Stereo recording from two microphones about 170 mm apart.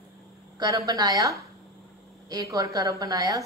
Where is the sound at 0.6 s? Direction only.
20° right (ahead or behind).